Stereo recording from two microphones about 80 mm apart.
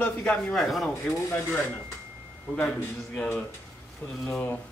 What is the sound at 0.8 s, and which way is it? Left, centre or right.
Speech, centre.